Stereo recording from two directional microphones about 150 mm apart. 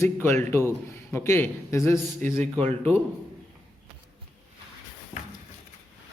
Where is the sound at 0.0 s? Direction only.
15° left (ahead or behind).